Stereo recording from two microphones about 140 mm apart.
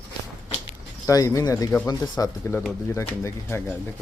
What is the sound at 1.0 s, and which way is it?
Speech, 20° left (ahead or behind).